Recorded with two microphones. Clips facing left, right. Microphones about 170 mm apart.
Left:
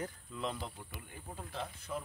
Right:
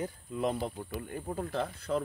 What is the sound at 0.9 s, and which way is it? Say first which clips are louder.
Speech: right 12 dB; 50° right (ahead or behind).